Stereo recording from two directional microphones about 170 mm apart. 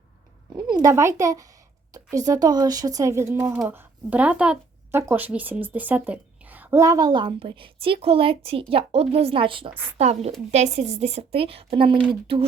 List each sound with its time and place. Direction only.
0.5 s a child's voice: 25° right (ahead or behind)